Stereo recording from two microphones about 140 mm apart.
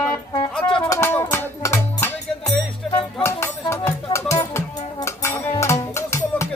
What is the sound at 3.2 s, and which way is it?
Speech, 20° left (ahead or behind).